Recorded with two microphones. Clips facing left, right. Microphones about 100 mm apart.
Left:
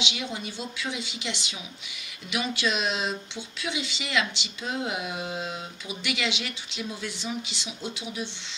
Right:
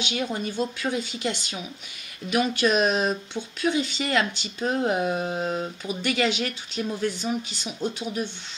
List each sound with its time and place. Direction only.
0.0 s speech: 45° right (ahead or behind)